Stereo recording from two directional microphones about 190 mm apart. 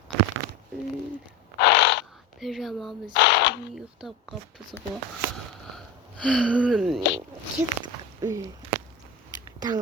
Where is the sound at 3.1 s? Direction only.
65° left (ahead or behind).